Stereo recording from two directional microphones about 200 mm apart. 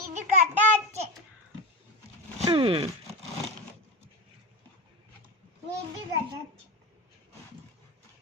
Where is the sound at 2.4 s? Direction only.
25° right (ahead or behind).